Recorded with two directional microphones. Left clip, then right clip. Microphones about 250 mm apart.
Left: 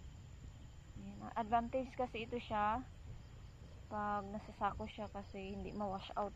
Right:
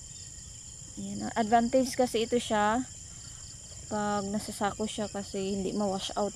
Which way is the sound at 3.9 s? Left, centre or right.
Right.